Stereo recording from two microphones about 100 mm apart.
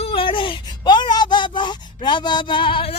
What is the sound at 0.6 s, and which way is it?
Speech, 45° left (ahead or behind).